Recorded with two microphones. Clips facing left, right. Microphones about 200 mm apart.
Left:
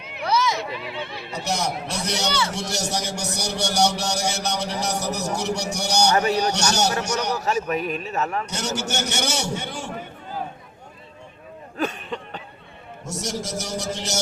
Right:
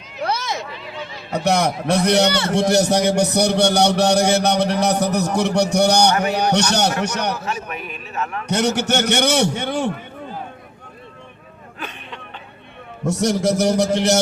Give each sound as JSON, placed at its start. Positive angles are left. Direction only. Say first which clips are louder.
{"t": 0.0, "sound": "a sound", "louder": "right 5 dB", "side_deg": 60}
{"t": 0.3, "sound": "a sound", "louder": "left 3 dB", "side_deg": -55}
{"t": 0.9, "sound": "speech", "louder": "even", "side_deg": 60}
{"t": 1.3, "sound": "a man's voice", "louder": "right 9 dB", "side_deg": -60}
{"t": 7.3, "sound": "a man's voice", "louder": "left 4 dB", "side_deg": 40}
{"t": 8.4, "sound": "a man's voice", "louder": "right 9 dB", "side_deg": -60}
{"t": 11.8, "sound": "cough", "louder": "left 7 dB", "side_deg": 40}
{"t": 13.1, "sound": "a man's voice", "louder": "right 11 dB", "side_deg": -60}